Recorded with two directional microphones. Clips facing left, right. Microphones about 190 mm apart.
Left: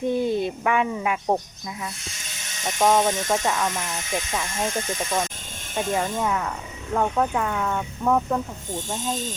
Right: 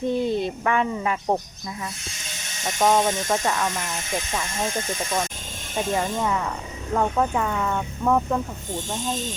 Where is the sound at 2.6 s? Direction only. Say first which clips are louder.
Even; centre (ahead or behind).